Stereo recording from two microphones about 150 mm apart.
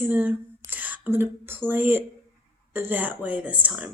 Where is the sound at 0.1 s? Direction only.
10° right (ahead or behind).